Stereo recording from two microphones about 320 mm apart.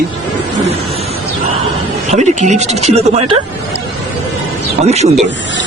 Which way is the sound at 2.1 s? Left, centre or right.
Right.